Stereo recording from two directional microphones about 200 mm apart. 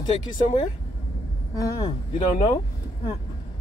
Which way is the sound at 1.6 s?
20° left (ahead or behind).